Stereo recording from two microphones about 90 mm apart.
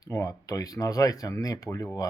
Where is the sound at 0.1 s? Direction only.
35° left (ahead or behind).